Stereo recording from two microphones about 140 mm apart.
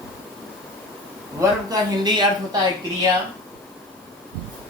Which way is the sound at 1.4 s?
30° right (ahead or behind).